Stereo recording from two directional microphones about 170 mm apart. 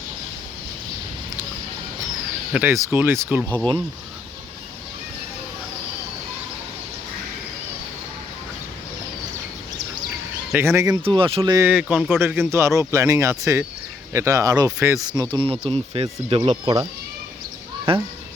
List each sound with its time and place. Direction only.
2.5 s speech: 10° right (ahead or behind)
10.5 s speech: 15° right (ahead or behind)
11.0 s speech: 30° right (ahead or behind)
11.5 s speech: 10° right (ahead or behind); by 16.5 s 35° right (ahead or behind)
17.9 s speech: 30° right (ahead or behind)